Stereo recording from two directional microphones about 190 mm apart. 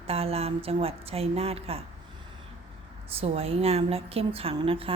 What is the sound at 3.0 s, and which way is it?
A woman's voice, 30° right (ahead or behind).